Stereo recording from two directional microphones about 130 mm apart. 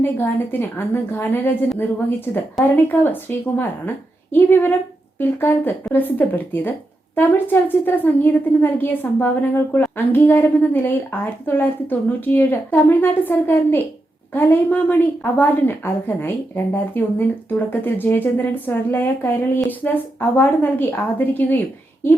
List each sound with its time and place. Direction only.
0.0 s a woman's voice: 15° left (ahead or behind)